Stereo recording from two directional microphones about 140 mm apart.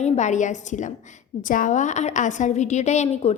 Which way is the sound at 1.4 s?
70° left (ahead or behind).